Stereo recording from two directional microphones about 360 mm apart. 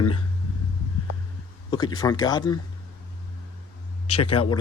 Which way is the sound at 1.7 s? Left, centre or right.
Centre.